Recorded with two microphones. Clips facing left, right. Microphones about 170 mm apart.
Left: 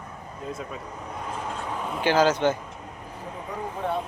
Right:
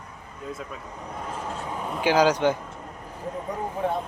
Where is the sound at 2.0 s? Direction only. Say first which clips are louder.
Right 1 dB; 10° right (ahead or behind).